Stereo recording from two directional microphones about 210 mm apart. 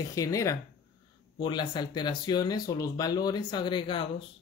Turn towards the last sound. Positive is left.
turn(degrees=25)  # may be behind; listen again after turning